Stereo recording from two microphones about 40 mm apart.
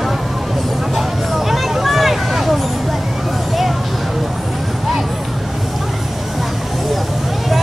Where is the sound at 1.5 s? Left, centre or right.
Centre.